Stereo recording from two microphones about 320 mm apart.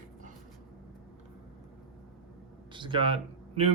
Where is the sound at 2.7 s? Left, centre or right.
Centre.